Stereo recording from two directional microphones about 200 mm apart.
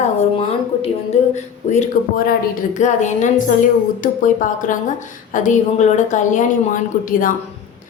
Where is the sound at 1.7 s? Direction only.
40° left (ahead or behind).